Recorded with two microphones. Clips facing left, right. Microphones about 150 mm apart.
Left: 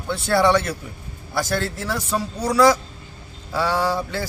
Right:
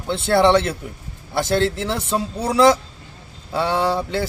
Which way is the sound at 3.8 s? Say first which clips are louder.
Right 2 dB; 20° right (ahead or behind).